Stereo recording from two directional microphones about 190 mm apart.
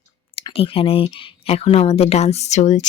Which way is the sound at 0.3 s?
30° left (ahead or behind).